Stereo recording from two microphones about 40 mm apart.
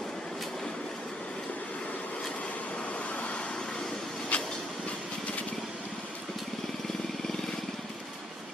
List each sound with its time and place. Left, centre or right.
4.3 s train: left